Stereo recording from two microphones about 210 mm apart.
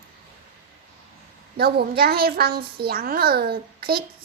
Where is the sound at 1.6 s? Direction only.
50° right (ahead or behind).